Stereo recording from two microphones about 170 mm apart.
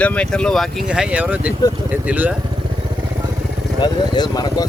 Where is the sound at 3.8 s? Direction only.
25° left (ahead or behind).